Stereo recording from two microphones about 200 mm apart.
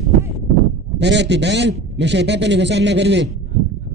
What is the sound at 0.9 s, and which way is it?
A man's voice, 60° right (ahead or behind).